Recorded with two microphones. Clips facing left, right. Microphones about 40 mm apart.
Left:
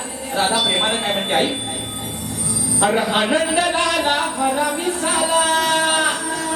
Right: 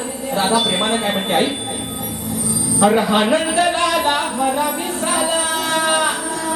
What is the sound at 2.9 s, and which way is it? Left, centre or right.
Speech, centre.